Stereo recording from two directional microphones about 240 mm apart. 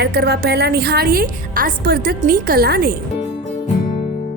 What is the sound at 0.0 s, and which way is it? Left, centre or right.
A woman's voice, right.